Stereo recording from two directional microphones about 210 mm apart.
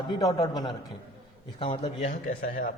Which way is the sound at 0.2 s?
20° left (ahead or behind).